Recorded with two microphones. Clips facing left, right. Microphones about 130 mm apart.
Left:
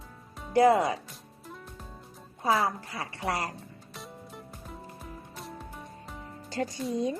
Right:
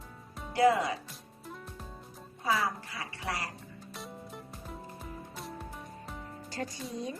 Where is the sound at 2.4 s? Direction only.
40° left (ahead or behind).